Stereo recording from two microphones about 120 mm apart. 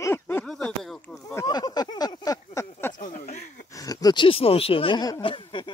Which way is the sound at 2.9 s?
90° left.